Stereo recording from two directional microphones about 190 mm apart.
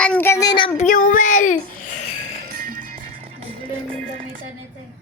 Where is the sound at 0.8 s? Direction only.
45° left (ahead or behind).